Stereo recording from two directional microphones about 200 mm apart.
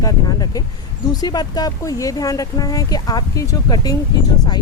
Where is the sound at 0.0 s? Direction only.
20° left (ahead or behind).